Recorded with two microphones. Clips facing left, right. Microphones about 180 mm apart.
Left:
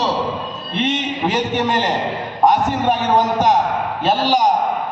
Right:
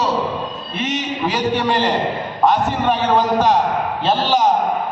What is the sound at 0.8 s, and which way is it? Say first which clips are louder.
Speech: left 1 dB; 25° left (ahead or behind).